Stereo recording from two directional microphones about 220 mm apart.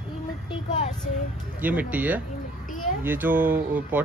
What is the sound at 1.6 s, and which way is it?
Speech, 5° right (ahead or behind).